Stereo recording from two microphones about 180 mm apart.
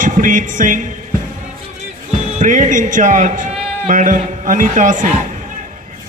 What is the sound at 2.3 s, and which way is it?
A man's voice, 45° right (ahead or behind).